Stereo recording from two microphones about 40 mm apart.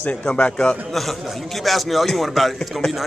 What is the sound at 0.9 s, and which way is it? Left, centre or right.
Speech, centre.